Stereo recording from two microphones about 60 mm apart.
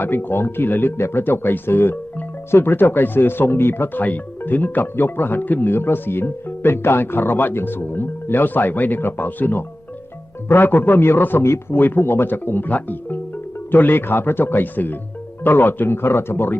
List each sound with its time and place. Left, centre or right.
0.0 s speech: left
4.0 s speech: left
11.4 s speech: left
11.8 s speech: left